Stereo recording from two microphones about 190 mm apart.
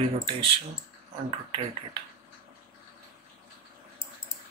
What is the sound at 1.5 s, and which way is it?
Speech, 25° right (ahead or behind).